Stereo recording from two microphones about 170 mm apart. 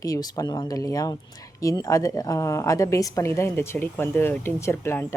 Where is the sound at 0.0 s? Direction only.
20° left (ahead or behind).